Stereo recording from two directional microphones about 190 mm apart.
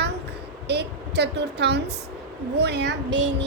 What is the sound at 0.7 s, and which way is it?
Vehicle, 60° right (ahead or behind).